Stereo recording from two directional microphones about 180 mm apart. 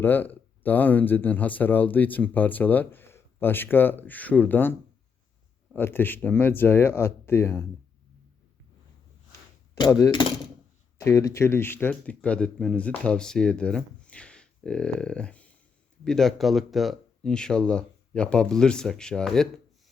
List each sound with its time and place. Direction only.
0.0 s speech: 10° left (ahead or behind)
9.7 s a sound: 20° left (ahead or behind)
10.9 s speech: 15° left (ahead or behind)